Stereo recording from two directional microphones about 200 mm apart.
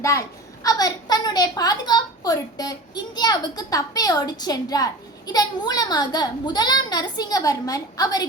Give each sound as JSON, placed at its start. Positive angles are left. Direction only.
{"t": 0.6, "sound": "a woman's voice", "side_deg": 20}